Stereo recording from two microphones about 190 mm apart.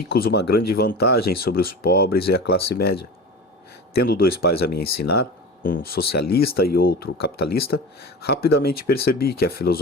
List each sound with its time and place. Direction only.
0.1 s speech: 55° left (ahead or behind)
3.9 s speech: 50° left (ahead or behind)